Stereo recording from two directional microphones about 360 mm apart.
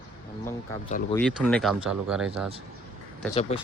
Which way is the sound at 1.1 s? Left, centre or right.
Centre.